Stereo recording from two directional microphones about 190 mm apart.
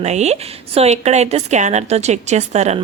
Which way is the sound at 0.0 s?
35° right (ahead or behind).